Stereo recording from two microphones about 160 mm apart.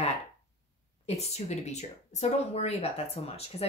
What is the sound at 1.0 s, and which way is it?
Speech, 40° left (ahead or behind).